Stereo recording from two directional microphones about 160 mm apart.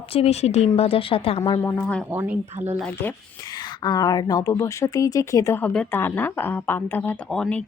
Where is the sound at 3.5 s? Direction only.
25° left (ahead or behind).